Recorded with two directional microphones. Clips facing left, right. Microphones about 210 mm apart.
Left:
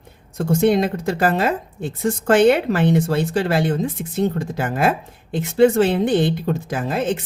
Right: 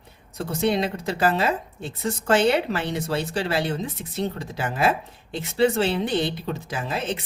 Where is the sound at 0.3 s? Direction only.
50° left (ahead or behind).